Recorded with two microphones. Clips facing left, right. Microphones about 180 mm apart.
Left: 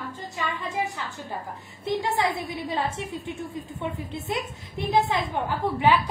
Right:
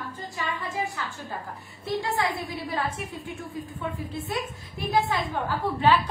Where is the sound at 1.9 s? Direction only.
20° left (ahead or behind).